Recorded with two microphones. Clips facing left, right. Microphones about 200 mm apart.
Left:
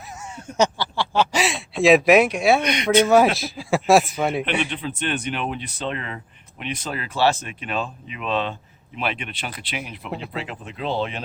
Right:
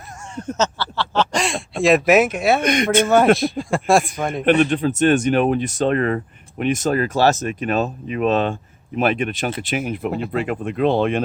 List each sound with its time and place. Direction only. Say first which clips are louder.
0.3 s a sound: left 1 dB; 10° left (ahead or behind)
1.7 s speech: even; centre (ahead or behind)
2.6 s speech: right 1 dB; 50° right (ahead or behind)
3.3 s speech: right 3 dB; centre (ahead or behind)
4.6 s speech: right 10 dB; 45° right (ahead or behind)